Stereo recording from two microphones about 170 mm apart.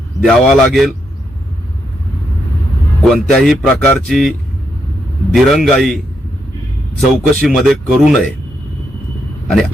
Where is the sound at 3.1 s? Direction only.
Centre (ahead or behind).